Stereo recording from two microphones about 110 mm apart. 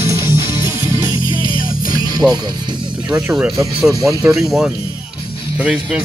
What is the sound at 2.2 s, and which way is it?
Speech, 5° right (ahead or behind).